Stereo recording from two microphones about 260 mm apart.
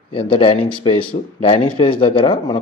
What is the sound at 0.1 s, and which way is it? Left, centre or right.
A man's voice, centre.